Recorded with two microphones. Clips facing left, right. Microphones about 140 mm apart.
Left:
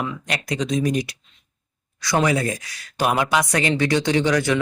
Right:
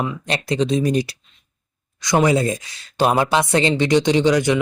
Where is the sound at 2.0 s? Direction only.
20° right (ahead or behind).